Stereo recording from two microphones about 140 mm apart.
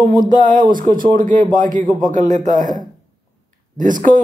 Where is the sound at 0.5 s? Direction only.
75° right (ahead or behind).